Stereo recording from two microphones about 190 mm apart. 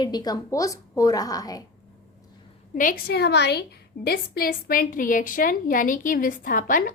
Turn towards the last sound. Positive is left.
turn(degrees=45)  # may be behind; listen again after turning